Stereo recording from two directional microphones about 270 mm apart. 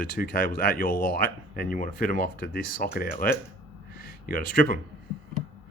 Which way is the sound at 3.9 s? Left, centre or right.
Left.